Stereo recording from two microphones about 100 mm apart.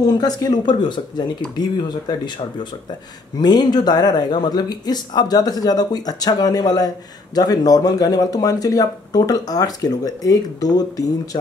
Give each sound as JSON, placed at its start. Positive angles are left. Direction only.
{"t": 0.0, "sound": "speech", "side_deg": 40}